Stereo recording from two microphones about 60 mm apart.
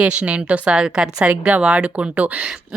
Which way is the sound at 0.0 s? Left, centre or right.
Right.